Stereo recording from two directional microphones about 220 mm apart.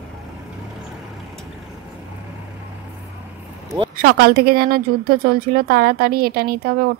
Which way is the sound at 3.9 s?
45° right (ahead or behind).